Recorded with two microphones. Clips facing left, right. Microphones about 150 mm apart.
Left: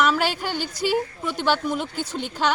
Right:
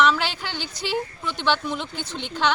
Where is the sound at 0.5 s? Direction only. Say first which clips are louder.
Left 5 dB; 45° left (ahead or behind).